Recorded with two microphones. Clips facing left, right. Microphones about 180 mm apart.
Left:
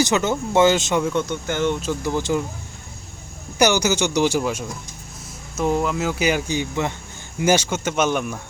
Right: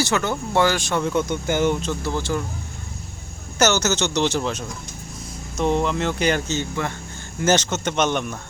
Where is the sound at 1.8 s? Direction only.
15° left (ahead or behind).